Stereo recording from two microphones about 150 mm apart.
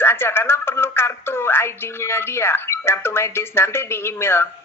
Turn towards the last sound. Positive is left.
turn(degrees=15)  # may be behind; listen again after turning